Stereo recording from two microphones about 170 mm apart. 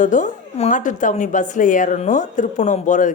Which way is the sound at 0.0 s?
45° left (ahead or behind).